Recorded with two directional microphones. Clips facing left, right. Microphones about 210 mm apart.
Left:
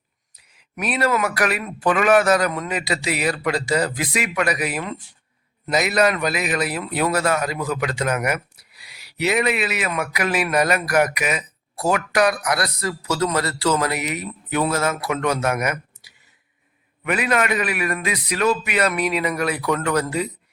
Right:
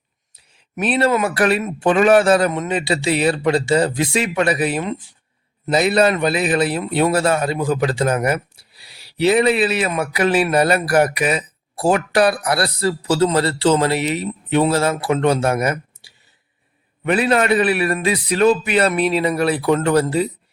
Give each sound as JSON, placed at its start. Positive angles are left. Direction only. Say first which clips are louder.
{"t": 0.3, "sound": "a man's voice", "louder": "right 6 dB", "side_deg": -30}